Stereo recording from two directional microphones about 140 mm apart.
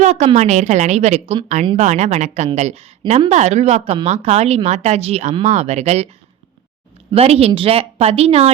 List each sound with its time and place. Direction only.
0.0 s a woman's voice: 55° right (ahead or behind)
1.7 s a woman's voice: 55° right (ahead or behind)
7.1 s speech: 45° right (ahead or behind)